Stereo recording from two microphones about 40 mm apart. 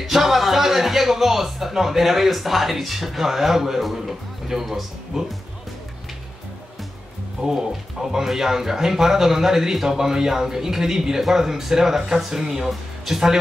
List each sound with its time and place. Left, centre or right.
0.0 s speech: centre
7.4 s speech: centre